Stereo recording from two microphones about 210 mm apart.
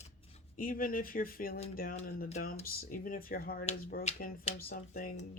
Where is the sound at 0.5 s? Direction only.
40° left (ahead or behind).